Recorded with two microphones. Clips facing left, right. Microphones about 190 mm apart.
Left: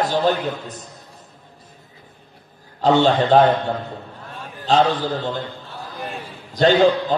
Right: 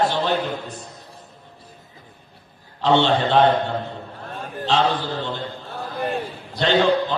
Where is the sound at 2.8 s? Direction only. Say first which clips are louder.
Left 2 dB; 40° left (ahead or behind).